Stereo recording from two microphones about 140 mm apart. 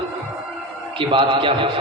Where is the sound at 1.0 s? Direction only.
35° right (ahead or behind).